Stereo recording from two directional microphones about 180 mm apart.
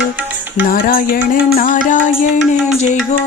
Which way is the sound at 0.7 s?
50° left (ahead or behind).